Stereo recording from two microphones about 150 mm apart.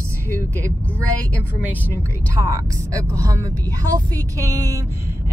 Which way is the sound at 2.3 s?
25° right (ahead or behind).